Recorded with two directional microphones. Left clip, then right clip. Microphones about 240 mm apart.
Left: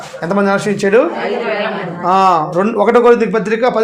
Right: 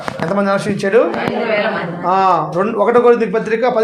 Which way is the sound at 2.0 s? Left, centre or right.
Left.